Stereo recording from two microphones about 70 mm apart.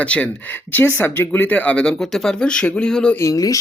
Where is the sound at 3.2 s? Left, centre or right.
Left.